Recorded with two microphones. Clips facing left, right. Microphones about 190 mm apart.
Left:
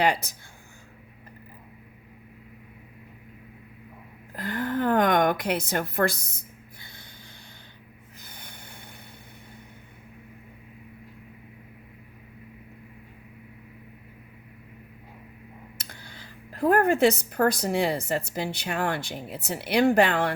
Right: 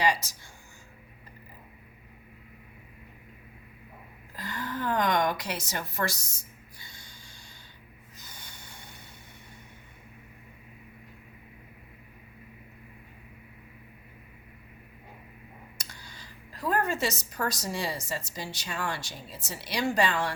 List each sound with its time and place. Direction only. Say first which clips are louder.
0.0 s speech: left 3 dB; 55° left (ahead or behind)
4.4 s a woman's voice: left 7 dB; 55° left (ahead or behind)
8.2 s snort: left 3 dB; 55° left (ahead or behind)
15.8 s speech: left 3 dB; 60° left (ahead or behind)